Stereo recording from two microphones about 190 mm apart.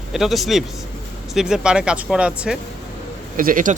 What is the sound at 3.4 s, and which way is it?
Speech, 45° right (ahead or behind).